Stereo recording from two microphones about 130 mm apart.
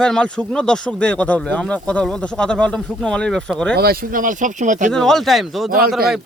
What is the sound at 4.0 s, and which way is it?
Speech, 90° right.